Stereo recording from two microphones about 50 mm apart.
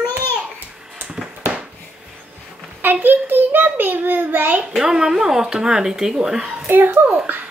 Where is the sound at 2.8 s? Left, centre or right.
Right.